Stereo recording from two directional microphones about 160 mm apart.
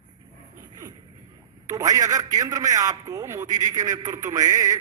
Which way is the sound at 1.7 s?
25° right (ahead or behind).